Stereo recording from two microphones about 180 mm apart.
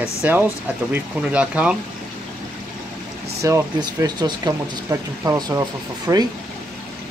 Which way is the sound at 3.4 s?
15° right (ahead or behind).